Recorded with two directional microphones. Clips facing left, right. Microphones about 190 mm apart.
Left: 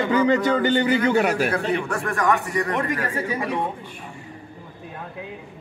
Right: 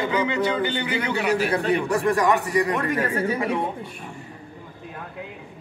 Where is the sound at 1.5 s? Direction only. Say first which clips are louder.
Right 2 dB; 20° right (ahead or behind).